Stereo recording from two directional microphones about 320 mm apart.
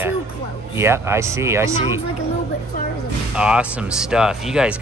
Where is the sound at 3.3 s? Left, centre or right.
Centre.